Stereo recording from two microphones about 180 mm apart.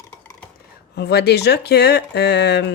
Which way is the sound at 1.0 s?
65° left (ahead or behind).